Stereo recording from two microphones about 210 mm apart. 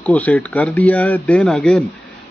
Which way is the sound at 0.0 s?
5° left (ahead or behind).